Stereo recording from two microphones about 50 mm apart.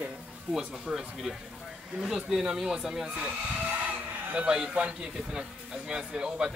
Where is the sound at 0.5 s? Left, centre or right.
Centre.